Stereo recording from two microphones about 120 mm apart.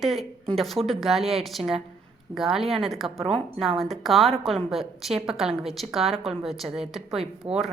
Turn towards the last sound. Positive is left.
turn(degrees=0)  # may be behind; listen again after turning